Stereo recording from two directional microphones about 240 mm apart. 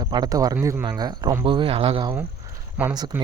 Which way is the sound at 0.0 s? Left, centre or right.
Centre.